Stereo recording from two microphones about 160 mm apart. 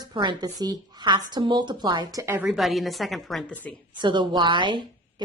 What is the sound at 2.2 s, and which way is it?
Speech, 15° right (ahead or behind).